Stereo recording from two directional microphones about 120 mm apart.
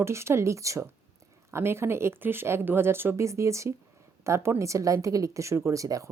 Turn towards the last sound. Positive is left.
turn(degrees=-30)  # may be behind; listen again after turning